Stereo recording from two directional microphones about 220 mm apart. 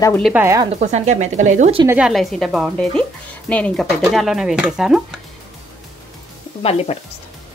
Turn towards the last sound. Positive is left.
turn(degrees=25)  # may be behind; listen again after turning